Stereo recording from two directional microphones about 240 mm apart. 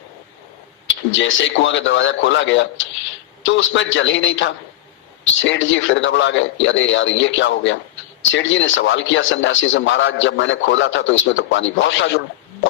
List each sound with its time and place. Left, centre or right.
1.1 s speech: left